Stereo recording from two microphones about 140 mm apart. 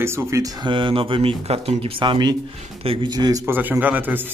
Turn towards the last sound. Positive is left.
turn(degrees=-15)  # may be behind; listen again after turning